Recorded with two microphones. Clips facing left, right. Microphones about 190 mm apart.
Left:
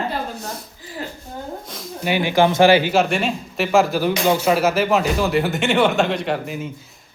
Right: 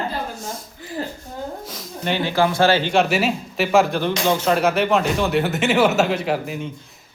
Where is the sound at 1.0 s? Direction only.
35° right (ahead or behind).